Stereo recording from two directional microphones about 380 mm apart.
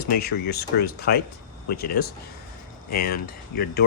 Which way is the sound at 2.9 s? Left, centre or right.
Left.